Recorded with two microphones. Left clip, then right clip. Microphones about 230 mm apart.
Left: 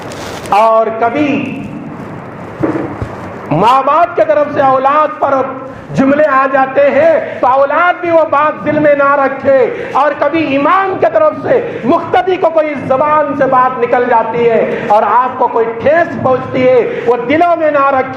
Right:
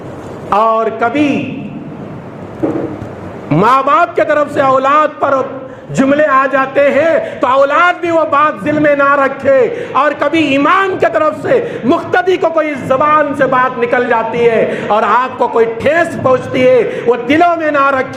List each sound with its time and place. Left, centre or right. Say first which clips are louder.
0.5 s a man's voice: left 3 dB; right
3.5 s a man's voice: left 1 dB; right